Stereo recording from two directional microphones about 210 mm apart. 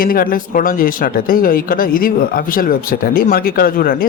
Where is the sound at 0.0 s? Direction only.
45° left (ahead or behind).